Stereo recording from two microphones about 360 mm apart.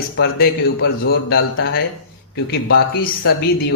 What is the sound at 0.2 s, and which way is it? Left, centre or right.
Speech, left.